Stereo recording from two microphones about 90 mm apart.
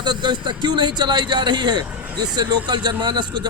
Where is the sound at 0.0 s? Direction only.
55° right (ahead or behind).